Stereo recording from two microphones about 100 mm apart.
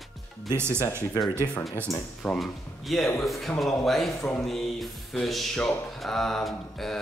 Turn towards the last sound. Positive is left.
turn(degrees=5)  # may be behind; listen again after turning